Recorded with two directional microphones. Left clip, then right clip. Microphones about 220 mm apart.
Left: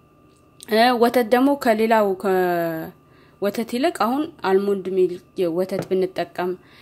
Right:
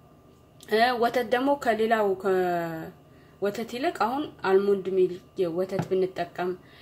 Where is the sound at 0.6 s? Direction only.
50° left (ahead or behind).